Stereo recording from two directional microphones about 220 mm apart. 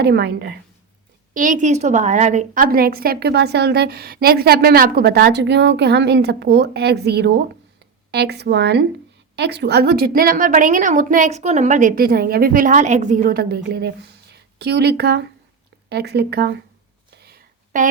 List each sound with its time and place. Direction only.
0.0 s a woman's voice: 50° right (ahead or behind)
1.3 s a woman's voice: 35° right (ahead or behind)
17.1 s a sound: 45° right (ahead or behind)